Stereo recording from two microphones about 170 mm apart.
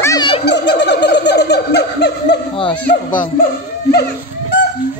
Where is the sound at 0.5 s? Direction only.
90° left.